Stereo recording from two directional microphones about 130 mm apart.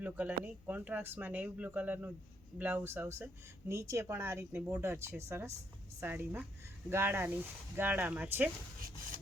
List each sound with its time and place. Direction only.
0.0 s speech: 10° right (ahead or behind)